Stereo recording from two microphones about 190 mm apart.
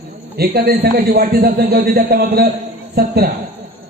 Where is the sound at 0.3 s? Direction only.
55° right (ahead or behind).